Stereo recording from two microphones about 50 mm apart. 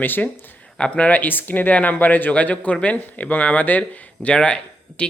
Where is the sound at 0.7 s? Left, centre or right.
Left.